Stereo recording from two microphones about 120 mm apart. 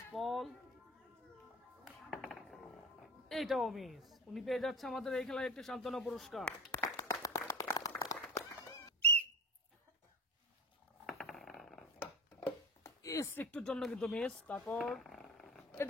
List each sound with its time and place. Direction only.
0.1 s speech: centre (ahead or behind)
2.0 s speech: centre (ahead or behind)
6.8 s applause: 25° left (ahead or behind)
8.0 s run: 30° left (ahead or behind)
11.1 s a sound: centre (ahead or behind)
12.0 s a sound: 15° left (ahead or behind)
13.0 s a sound: 25° left (ahead or behind)
13.3 s speech: 15° left (ahead or behind)
13.6 s speech: 5° left (ahead or behind)